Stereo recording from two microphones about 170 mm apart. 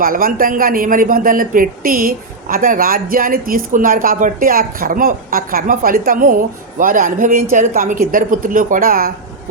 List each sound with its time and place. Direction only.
0.0 s speech: 55° right (ahead or behind)